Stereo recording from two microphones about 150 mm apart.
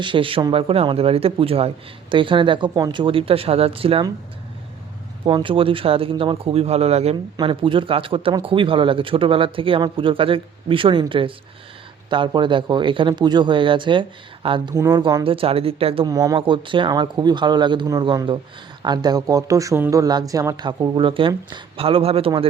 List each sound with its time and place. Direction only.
0.0 s a man's voice: 35° right (ahead or behind)
5.2 s a man's voice: 35° right (ahead or behind)
16.0 s speech: 25° right (ahead or behind); by 22.3 s 40° right (ahead or behind)